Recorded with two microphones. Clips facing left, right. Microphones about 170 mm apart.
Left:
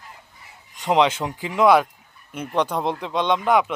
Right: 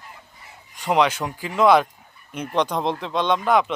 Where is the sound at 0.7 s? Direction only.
20° left (ahead or behind).